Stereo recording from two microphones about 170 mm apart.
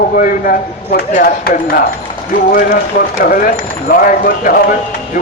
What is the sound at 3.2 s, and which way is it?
A man's voice, 55° left (ahead or behind).